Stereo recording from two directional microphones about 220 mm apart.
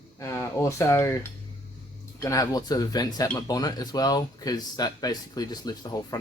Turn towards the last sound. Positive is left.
turn(degrees=15)  # may be behind; listen again after turning